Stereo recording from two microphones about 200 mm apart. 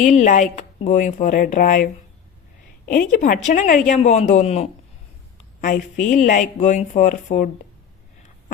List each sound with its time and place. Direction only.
0.0 s a woman's voice: 35° left (ahead or behind)